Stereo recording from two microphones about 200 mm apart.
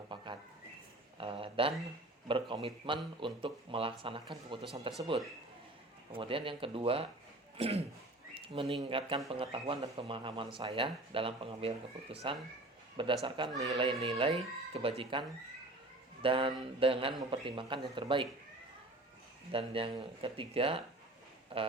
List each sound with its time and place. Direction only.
0.1 s a sound: 25° right (ahead or behind)
1.2 s speech: 25° right (ahead or behind)
6.1 s speech: 25° right (ahead or behind)
16.2 s speech: 25° right (ahead or behind)
19.5 s speech: 25° right (ahead or behind)